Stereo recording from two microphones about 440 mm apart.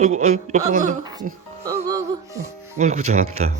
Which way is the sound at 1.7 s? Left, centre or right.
Centre.